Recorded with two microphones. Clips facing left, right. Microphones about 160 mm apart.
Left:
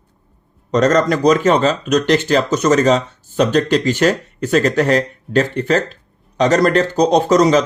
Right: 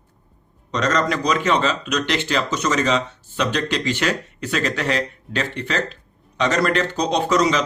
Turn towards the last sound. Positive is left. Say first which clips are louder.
# left 7 dB
turn(degrees=45)  # may be behind; listen again after turning